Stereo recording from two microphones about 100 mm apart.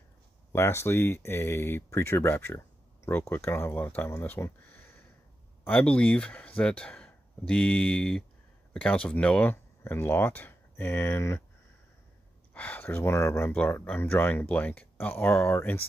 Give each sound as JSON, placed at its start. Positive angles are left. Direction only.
{"t": 0.5, "sound": "speech", "side_deg": 25}
{"t": 12.5, "sound": "speech", "side_deg": 15}